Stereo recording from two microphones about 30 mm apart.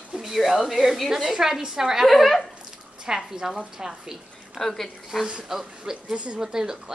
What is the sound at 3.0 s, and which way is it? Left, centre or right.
A woman's voice, centre.